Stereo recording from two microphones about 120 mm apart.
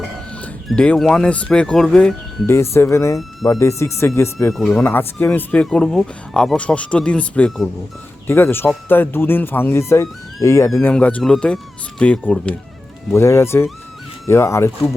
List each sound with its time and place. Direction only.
0.7 s speech: 5° left (ahead or behind)
2.5 s speech: 20° left (ahead or behind)
4.5 s speech: 5° left (ahead or behind)
4.8 s speech: 15° left (ahead or behind)
8.3 s speech: 20° left (ahead or behind)
10.8 s speech: 10° left (ahead or behind)
13.1 s speech: 20° left (ahead or behind)